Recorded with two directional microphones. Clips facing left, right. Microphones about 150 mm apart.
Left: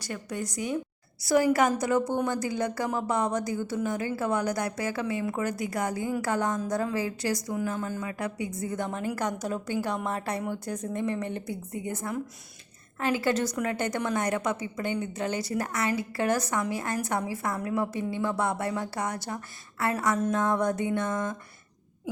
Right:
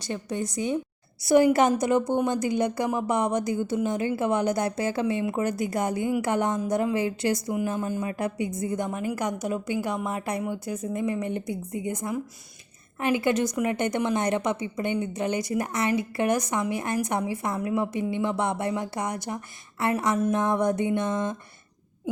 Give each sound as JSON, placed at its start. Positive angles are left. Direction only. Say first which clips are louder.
{"t": 0.0, "sound": "a woman's voice", "louder": "right 4 dB", "side_deg": -25}